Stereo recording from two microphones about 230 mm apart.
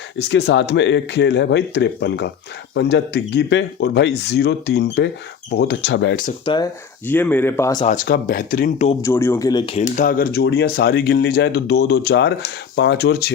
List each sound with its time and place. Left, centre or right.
0.2 s speech: left
6.4 s speech: centre
7.1 s speech: centre
7.9 s speech: left
9.0 s speech: centre
9.9 s speech: left